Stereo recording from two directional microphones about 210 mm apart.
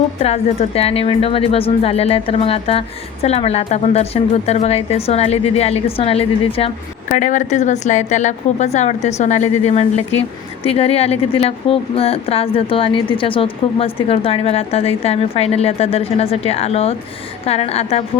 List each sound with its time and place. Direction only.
0.2 s a woman's voice: 30° left (ahead or behind)
7.1 s a woman's voice: 35° left (ahead or behind)